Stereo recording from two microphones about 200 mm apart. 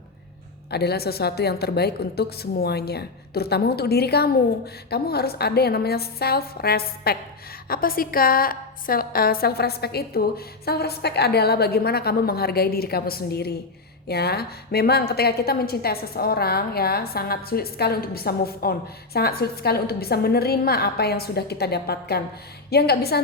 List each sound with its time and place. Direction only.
0.7 s a woman's voice: 55° left (ahead or behind)